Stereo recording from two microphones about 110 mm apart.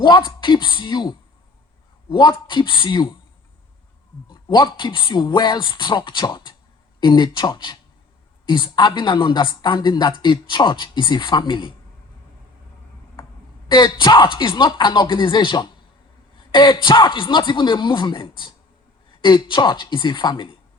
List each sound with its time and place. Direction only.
0.0 s speech: 45° left (ahead or behind)
4.3 s speech: 45° left (ahead or behind)
13.7 s speech: 45° left (ahead or behind)